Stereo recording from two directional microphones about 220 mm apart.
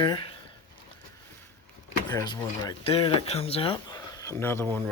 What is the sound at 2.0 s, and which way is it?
Speech, 20° left (ahead or behind).